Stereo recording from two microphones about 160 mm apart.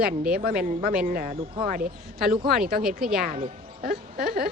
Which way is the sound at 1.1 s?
65° right (ahead or behind).